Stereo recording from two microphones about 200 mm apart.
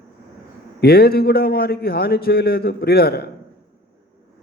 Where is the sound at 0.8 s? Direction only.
50° left (ahead or behind).